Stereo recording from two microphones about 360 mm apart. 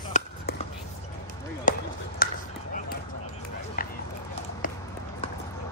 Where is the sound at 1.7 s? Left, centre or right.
Left.